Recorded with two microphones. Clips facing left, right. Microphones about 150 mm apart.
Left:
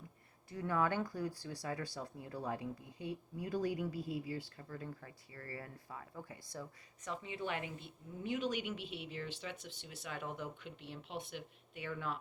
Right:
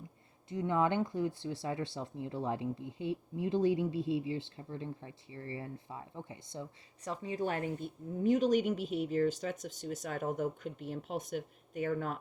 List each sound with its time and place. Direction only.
0.5 s speech: 20° right (ahead or behind); by 12.2 s 45° right (ahead or behind)